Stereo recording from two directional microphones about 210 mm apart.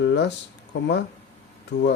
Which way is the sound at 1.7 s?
55° left (ahead or behind).